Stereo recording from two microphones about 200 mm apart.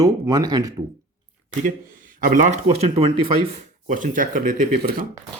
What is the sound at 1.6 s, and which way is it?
Speech, 40° right (ahead or behind).